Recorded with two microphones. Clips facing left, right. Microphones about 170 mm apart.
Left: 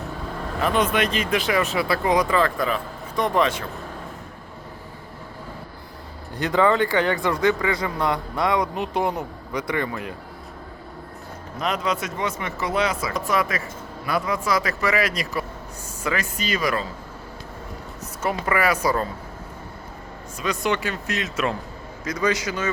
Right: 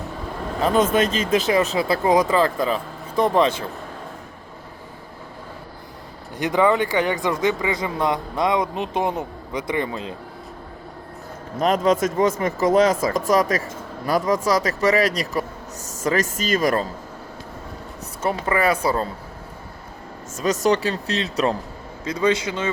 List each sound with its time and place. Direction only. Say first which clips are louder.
0.6 s speech: right 3 dB; 40° right (ahead or behind)
6.3 s speech: right 1 dB; 15° right (ahead or behind)
11.5 s speech: right 7 dB; 45° right (ahead or behind)
18.2 s speech: right 2 dB; 30° right (ahead or behind)
20.3 s speech: right 5 dB; 40° right (ahead or behind)